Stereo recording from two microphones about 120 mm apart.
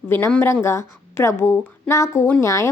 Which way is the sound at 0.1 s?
15° left (ahead or behind).